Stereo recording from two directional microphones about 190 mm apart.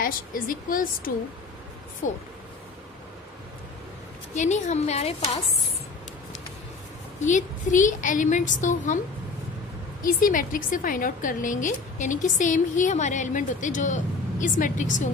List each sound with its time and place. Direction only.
0.0 s a woman's voice: 45° left (ahead or behind)
2.0 s speech: 90° left
4.4 s a woman's voice: 35° left (ahead or behind)
7.2 s a woman's voice: 40° left (ahead or behind)
10.0 s a woman's voice: 45° left (ahead or behind)